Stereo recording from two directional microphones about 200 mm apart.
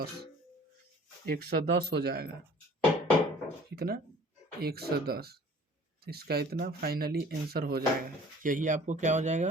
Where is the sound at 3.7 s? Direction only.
50° right (ahead or behind).